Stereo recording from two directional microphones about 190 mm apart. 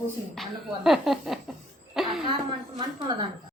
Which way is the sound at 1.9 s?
Centre (ahead or behind).